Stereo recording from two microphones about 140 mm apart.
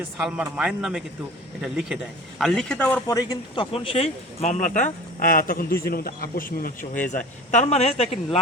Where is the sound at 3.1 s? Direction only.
30° left (ahead or behind); by 7.0 s 90° left.